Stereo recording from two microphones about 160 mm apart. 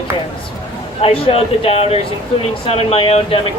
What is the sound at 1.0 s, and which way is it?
Speech, 35° left (ahead or behind).